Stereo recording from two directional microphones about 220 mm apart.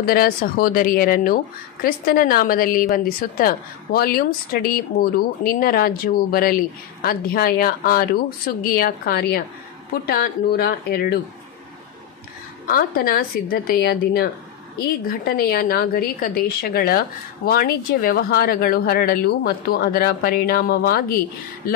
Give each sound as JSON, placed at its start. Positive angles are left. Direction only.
{"t": 0.0, "sound": "speech", "side_deg": 40}
{"t": 12.6, "sound": "speech", "side_deg": 40}